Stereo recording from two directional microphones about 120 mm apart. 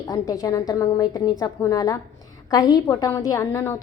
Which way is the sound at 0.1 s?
30° left (ahead or behind).